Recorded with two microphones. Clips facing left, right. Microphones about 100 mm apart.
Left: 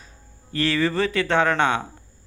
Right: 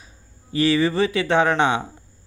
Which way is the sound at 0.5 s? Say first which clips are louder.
Right 3 dB; 15° right (ahead or behind).